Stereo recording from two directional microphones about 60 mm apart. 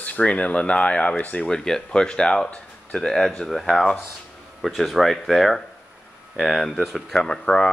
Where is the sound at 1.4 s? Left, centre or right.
Centre.